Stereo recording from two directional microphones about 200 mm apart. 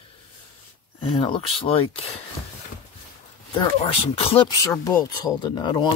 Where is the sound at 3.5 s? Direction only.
30° left (ahead or behind).